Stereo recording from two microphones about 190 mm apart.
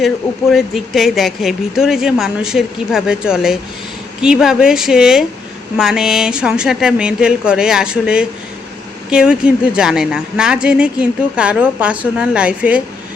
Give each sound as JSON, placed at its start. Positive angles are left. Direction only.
{"t": 0.5, "sound": "speech", "side_deg": 0}